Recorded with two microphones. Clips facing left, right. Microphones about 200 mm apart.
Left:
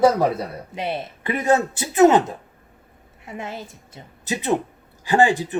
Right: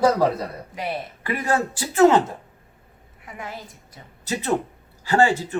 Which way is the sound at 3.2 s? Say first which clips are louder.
Left 4 dB; 25° left (ahead or behind).